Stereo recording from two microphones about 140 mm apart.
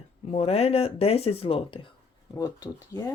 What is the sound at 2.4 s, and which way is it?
Speech, 30° left (ahead or behind).